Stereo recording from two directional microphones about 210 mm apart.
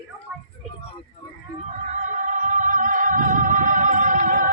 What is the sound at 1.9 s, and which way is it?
Music, 35° right (ahead or behind).